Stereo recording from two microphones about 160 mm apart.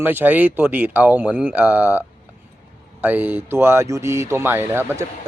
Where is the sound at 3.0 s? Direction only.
10° right (ahead or behind).